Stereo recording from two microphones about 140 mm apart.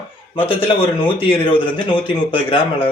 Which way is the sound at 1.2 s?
40° left (ahead or behind).